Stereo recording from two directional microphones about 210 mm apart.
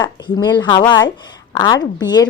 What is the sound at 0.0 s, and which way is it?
Speech, 20° left (ahead or behind).